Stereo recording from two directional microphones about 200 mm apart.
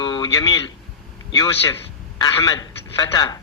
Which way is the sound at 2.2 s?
20° left (ahead or behind).